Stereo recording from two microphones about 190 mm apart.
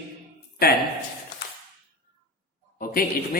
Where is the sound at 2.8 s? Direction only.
50° left (ahead or behind).